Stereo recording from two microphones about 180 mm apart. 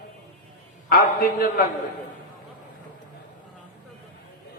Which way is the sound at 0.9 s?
55° left (ahead or behind).